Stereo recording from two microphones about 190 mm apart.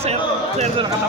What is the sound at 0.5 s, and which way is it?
Speech, 35° right (ahead or behind).